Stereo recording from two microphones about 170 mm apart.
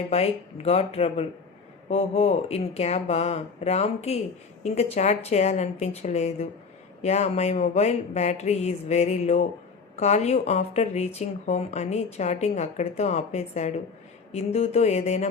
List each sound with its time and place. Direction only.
0.1 s speech: 35° left (ahead or behind)